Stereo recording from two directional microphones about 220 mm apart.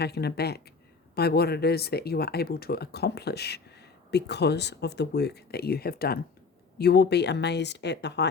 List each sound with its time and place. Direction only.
0.0 s speech: 45° left (ahead or behind)